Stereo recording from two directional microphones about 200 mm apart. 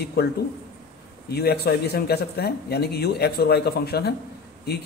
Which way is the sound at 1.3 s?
50° left (ahead or behind).